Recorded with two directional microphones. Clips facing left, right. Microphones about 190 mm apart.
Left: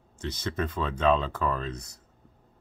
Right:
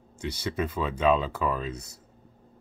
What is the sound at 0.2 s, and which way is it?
Speech, 10° right (ahead or behind).